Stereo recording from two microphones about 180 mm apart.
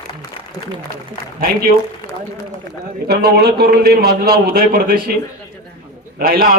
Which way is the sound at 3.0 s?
60° right (ahead or behind).